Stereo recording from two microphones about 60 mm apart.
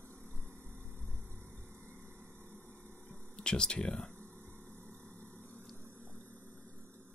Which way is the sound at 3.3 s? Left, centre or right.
Centre.